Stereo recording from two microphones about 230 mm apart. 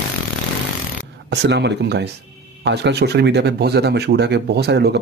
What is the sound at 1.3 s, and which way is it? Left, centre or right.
Speech, right.